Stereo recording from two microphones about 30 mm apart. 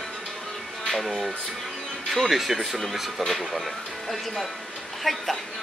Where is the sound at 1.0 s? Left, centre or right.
Centre.